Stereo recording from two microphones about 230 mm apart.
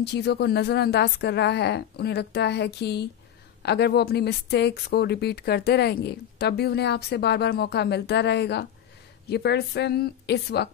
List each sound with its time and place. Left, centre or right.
0.0 s speech: left